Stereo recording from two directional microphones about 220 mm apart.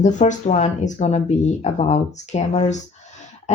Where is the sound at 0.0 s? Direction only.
35° left (ahead or behind).